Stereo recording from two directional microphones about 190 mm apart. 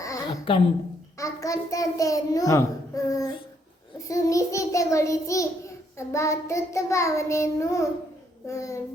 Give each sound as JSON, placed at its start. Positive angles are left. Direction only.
{"t": 0.5, "sound": "a woman's voice", "side_deg": 30}
{"t": 1.2, "sound": "a child's voice", "side_deg": 15}
{"t": 3.9, "sound": "child singing", "side_deg": 15}